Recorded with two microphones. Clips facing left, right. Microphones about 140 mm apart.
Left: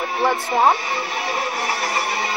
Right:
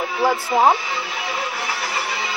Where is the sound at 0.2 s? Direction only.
5° right (ahead or behind).